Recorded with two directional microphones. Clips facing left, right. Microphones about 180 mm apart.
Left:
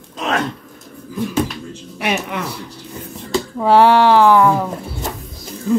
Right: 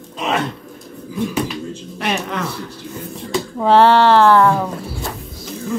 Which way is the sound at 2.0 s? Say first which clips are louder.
Left 1 dB; 5° left (ahead or behind).